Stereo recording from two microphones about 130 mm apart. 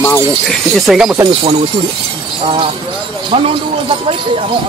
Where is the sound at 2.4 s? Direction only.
45° right (ahead or behind).